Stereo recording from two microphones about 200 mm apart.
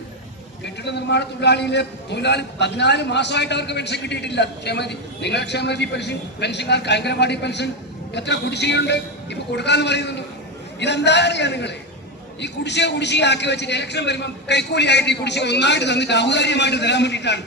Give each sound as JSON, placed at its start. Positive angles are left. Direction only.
{"t": 0.6, "sound": "a man's voice", "side_deg": 60}